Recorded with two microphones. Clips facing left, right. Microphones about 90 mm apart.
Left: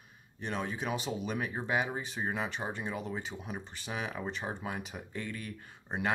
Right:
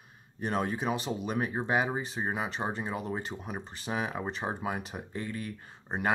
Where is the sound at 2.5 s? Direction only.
35° right (ahead or behind).